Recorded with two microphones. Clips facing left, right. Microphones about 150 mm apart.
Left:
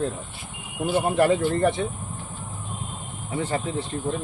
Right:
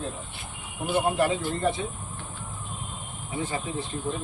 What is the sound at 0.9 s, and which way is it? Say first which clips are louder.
Speech: left 4 dB; 60° left (ahead or behind).